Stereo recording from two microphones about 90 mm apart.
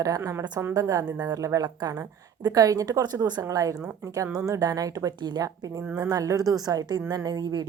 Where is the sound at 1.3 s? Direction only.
40° right (ahead or behind).